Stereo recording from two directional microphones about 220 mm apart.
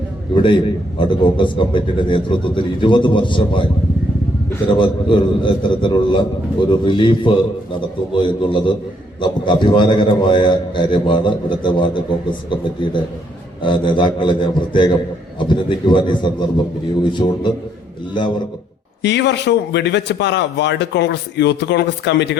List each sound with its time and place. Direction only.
0.3 s a man's voice: 20° left (ahead or behind)
4.7 s a man's voice: 20° left (ahead or behind)
19.0 s a man's voice: 50° left (ahead or behind)